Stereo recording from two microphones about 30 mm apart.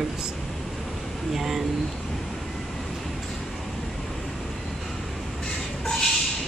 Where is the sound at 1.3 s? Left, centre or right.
Centre.